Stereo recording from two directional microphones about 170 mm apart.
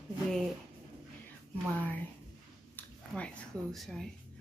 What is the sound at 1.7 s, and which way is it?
Speech, 10° left (ahead or behind).